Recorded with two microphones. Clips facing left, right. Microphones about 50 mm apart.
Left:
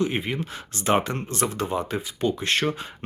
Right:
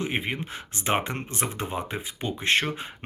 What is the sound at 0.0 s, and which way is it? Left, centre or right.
Speech, right.